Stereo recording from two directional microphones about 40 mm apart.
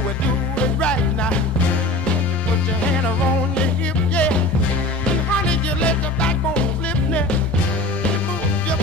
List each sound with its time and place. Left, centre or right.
0.6 s music: left
4.1 s music: left
5.5 s music: left